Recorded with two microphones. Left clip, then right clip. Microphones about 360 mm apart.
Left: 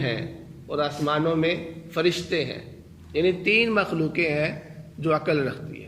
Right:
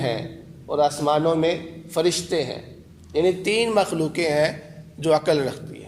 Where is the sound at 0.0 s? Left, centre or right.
Centre.